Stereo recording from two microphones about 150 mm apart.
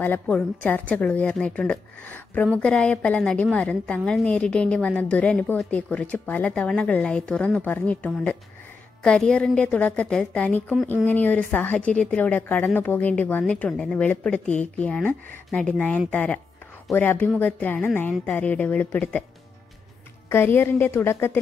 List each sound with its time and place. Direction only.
0.0 s a woman's voice: 10° left (ahead or behind)
20.2 s a woman's voice: 15° left (ahead or behind)